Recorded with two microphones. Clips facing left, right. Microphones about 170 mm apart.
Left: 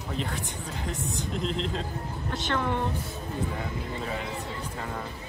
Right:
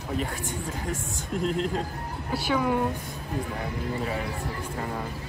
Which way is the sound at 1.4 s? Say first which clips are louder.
Right 5 dB; 50° right (ahead or behind).